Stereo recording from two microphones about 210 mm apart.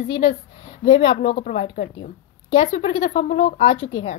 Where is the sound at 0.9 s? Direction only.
25° left (ahead or behind).